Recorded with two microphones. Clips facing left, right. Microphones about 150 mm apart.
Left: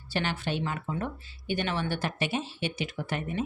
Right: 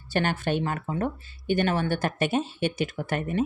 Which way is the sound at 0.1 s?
50° right (ahead or behind).